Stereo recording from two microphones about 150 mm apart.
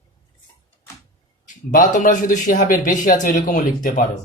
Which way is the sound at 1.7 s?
65° left (ahead or behind).